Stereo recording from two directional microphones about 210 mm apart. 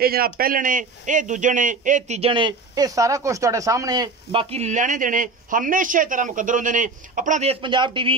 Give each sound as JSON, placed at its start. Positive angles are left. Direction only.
{"t": 0.0, "sound": "a man's voice", "side_deg": -45}
{"t": 7.6, "sound": "speech", "side_deg": -20}